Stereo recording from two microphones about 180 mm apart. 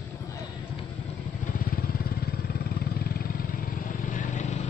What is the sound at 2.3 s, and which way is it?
Vehicle, 55° left (ahead or behind).